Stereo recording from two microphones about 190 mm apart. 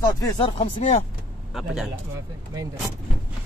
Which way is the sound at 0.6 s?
40° left (ahead or behind).